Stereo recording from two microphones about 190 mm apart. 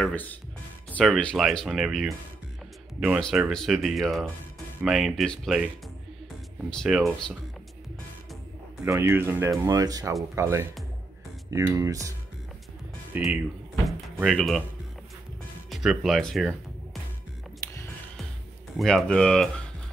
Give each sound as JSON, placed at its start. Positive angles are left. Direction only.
{"t": 0.0, "sound": "speech", "side_deg": 10}
{"t": 3.2, "sound": "speech", "side_deg": 0}
{"t": 6.7, "sound": "speech", "side_deg": 0}
{"t": 8.8, "sound": "speech", "side_deg": -15}
{"t": 13.1, "sound": "speech", "side_deg": -5}
{"t": 13.8, "sound": "door", "side_deg": 0}
{"t": 15.7, "sound": "speech", "side_deg": 0}
{"t": 18.8, "sound": "speech", "side_deg": 0}